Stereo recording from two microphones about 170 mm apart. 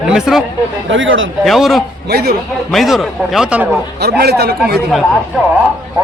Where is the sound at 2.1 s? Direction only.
65° right (ahead or behind).